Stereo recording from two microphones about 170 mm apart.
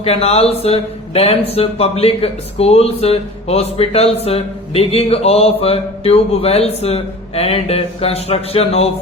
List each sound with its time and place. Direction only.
0.0 s speech: 35° left (ahead or behind)